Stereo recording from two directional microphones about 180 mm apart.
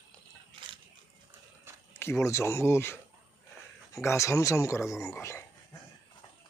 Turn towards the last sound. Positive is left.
turn(degrees=15)  # may be behind; listen again after turning